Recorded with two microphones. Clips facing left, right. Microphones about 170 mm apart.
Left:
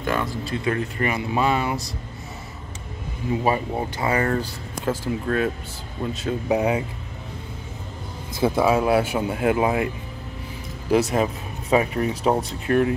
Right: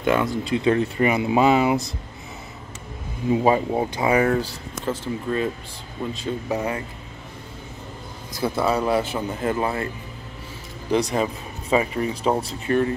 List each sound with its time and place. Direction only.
0.0 s speech: 20° right (ahead or behind)
3.4 s speech: 15° right (ahead or behind)
4.8 s speech: 5° left (ahead or behind)
6.5 s speech: 15° left (ahead or behind)
8.4 s speech: 15° left (ahead or behind)
10.9 s speech: 5° left (ahead or behind)